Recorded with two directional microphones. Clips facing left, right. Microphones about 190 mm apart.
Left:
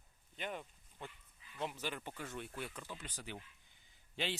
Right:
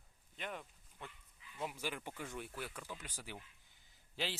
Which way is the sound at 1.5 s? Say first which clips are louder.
Left 1 dB; 5° right (ahead or behind).